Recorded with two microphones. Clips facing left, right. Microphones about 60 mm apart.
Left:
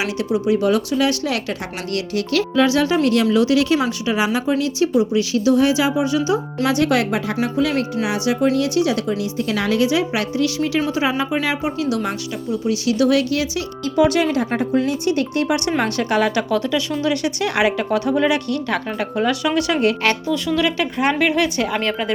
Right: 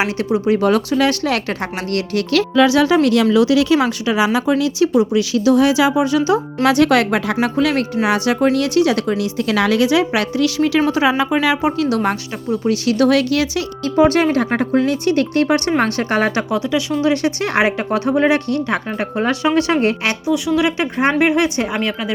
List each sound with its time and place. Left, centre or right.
0.0 s speech: right
0.5 s a woman's voice: right
6.7 s a woman's voice: right
11.9 s speech: right
12.6 s speech: right
13.9 s speech: right
16.6 s a woman's voice: centre
17.0 s speech: right
20.1 s a woman's voice: centre
20.7 s speech: right